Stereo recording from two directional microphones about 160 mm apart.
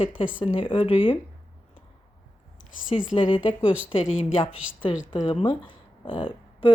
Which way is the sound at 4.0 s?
5° right (ahead or behind).